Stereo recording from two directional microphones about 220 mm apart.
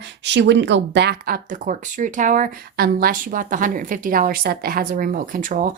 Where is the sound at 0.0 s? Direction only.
50° right (ahead or behind).